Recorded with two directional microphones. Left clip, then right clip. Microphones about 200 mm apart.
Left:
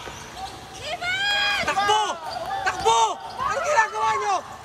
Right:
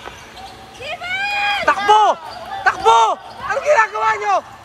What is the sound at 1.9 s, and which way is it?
Basketball bounce, 10° left (ahead or behind).